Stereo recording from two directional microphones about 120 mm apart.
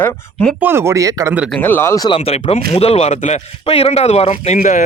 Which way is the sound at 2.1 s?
55° left (ahead or behind).